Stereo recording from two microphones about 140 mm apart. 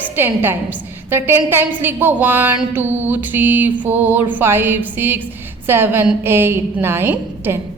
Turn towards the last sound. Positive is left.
turn(degrees=-15)  # may be behind; listen again after turning